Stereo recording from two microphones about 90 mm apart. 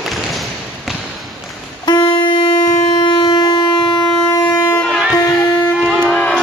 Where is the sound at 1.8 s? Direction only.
50° left (ahead or behind).